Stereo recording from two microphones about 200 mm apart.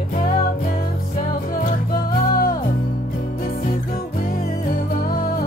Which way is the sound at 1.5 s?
45° left (ahead or behind).